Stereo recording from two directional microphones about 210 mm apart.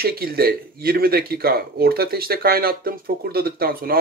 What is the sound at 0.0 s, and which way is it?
Speech, 45° right (ahead or behind).